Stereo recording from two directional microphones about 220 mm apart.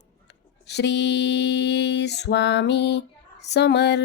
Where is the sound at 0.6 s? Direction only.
50° left (ahead or behind).